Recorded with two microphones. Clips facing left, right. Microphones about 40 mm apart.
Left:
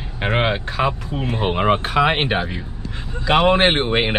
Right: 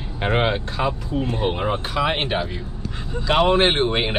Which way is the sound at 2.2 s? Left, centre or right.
Left.